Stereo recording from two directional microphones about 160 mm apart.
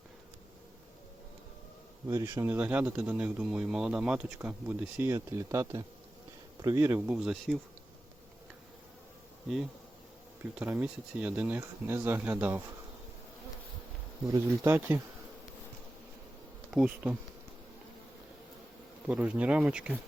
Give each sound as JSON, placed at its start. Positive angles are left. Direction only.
{"t": 2.0, "sound": "speech", "side_deg": -20}
{"t": 7.2, "sound": "speech", "side_deg": 0}
{"t": 10.6, "sound": "speech", "side_deg": -10}
{"t": 14.4, "sound": "speech", "side_deg": -15}
{"t": 16.7, "sound": "speech", "side_deg": -10}
{"t": 19.0, "sound": "speech", "side_deg": -10}